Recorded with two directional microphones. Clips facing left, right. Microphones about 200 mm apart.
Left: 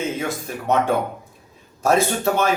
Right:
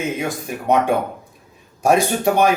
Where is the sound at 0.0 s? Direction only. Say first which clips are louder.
Right 1 dB; 15° right (ahead or behind).